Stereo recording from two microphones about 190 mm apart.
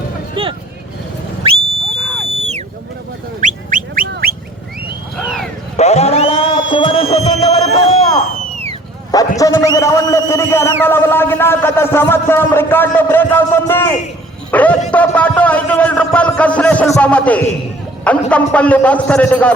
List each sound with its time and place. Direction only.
0.4 s vehicle: 25° right (ahead or behind)
2.0 s a sound: 5° left (ahead or behind)
2.3 s sheep: 35° right (ahead or behind)
3.4 s fowl: 45° right (ahead or behind)
4.1 s a sound: 50° right (ahead or behind)
5.7 s music: 35° left (ahead or behind)
9.1 s a man's voice: 20° left (ahead or behind)